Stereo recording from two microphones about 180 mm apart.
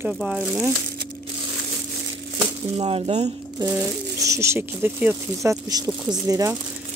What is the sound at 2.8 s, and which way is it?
Speech, 35° right (ahead or behind).